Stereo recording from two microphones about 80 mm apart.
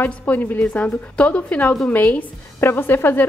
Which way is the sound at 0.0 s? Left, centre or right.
Left.